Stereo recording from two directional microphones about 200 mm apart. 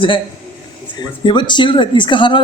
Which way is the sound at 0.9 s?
25° left (ahead or behind).